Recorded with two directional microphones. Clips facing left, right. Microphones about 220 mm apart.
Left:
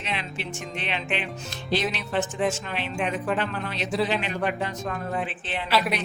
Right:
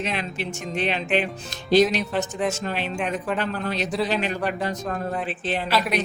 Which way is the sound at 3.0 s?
Centre (ahead or behind).